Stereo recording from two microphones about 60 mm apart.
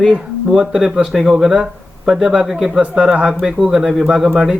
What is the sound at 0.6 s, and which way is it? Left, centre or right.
A man's voice, centre.